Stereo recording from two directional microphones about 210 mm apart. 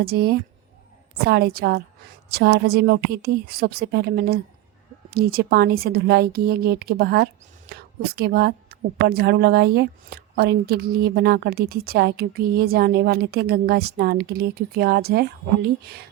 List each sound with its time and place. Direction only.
0.0 s a woman's voice: 50° right (ahead or behind)